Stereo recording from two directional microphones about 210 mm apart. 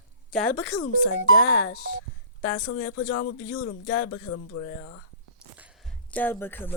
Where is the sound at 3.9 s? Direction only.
90° left.